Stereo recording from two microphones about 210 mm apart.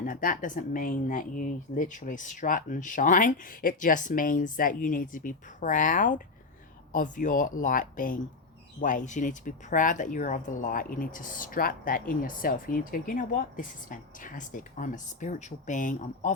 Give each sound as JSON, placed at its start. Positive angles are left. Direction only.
{"t": 0.0, "sound": "speech", "side_deg": 40}